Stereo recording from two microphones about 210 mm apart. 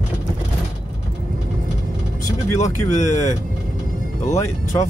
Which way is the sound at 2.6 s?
35° left (ahead or behind).